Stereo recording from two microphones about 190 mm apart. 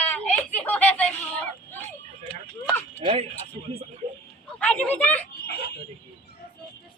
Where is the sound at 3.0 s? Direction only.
30° right (ahead or behind).